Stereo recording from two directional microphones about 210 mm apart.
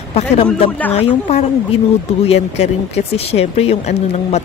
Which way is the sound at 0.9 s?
30° left (ahead or behind).